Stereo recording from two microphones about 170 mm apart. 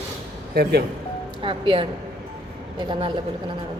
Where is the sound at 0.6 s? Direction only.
70° right (ahead or behind).